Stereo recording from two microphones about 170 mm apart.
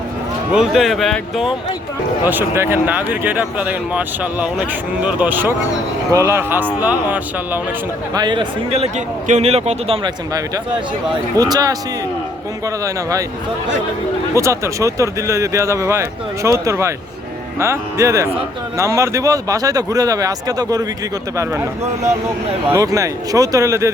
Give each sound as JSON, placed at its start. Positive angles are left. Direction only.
{"t": 0.5, "sound": "speech", "side_deg": 0}
{"t": 2.2, "sound": "speech", "side_deg": -10}
{"t": 8.1, "sound": "a man's voice", "side_deg": -25}
{"t": 11.3, "sound": "speech", "side_deg": -20}
{"t": 12.8, "sound": "speech", "side_deg": -20}
{"t": 14.3, "sound": "speech", "side_deg": -15}
{"t": 22.7, "sound": "speech", "side_deg": -20}